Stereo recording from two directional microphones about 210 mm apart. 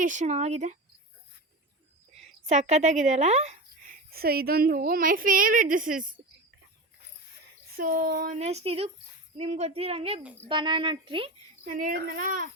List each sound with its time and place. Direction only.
0.0 s a woman's voice: 35° right (ahead or behind)
2.5 s a woman's voice: 35° right (ahead or behind)
7.8 s a woman's voice: 40° right (ahead or behind); by 11.3 s 25° right (ahead or behind)
11.6 s a woman's voice: 40° right (ahead or behind)